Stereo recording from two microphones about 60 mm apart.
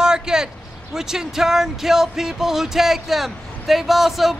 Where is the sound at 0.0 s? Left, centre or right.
Centre.